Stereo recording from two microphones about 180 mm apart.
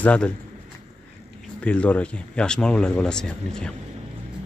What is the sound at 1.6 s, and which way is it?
Speech, 5° left (ahead or behind).